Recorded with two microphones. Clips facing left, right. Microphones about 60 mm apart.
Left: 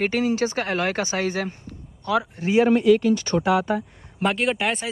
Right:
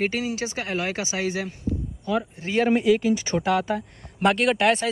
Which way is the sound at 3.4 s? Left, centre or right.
Centre.